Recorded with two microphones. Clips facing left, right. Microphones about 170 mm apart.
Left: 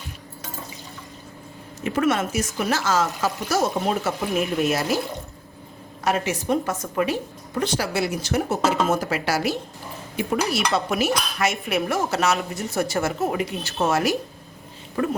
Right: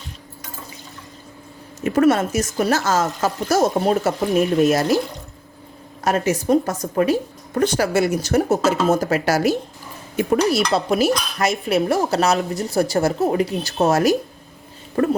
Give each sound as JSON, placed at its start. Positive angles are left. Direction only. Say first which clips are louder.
{"t": 1.8, "sound": "speech", "louder": "right 6 dB", "side_deg": -40}
{"t": 6.1, "sound": "speech", "louder": "right 5 dB", "side_deg": -40}
{"t": 15.0, "sound": "a sound", "louder": "right 6 dB", "side_deg": -50}